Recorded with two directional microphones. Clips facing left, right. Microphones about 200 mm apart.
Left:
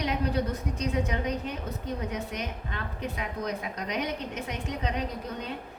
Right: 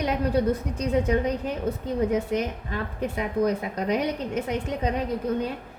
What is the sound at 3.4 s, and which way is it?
A woman's voice, 50° right (ahead or behind).